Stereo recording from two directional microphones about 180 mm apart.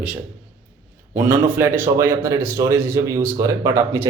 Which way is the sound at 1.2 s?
10° right (ahead or behind).